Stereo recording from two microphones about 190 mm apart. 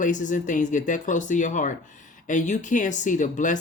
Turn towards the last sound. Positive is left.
turn(degrees=40)  # may be behind; listen again after turning